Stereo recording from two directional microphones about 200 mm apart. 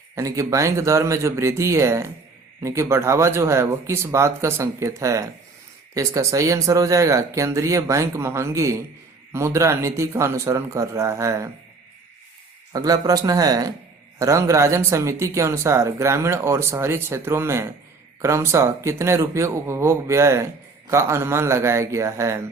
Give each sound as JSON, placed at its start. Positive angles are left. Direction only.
{"t": 0.2, "sound": "speech", "side_deg": -15}
{"t": 12.7, "sound": "speech", "side_deg": -20}